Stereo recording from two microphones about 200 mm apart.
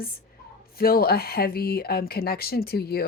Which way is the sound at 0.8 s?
50° left (ahead or behind).